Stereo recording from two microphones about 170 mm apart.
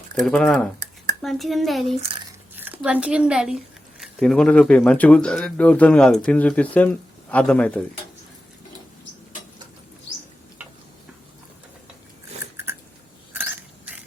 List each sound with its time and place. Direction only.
0.2 s speech: centre (ahead or behind)
2.6 s a woman's voice: 10° right (ahead or behind); by 7.8 s 5° left (ahead or behind)
13.3 s a sound: 10° right (ahead or behind)